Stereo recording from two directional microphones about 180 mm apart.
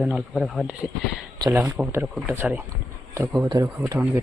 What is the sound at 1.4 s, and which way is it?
Speech, 15° right (ahead or behind).